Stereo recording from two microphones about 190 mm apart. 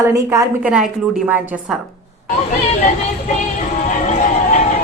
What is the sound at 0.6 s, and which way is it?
Speech, 5° right (ahead or behind).